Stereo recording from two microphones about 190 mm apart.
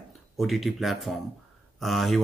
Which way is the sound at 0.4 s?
Centre (ahead or behind).